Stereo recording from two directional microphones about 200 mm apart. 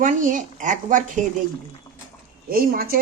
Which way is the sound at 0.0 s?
40° right (ahead or behind).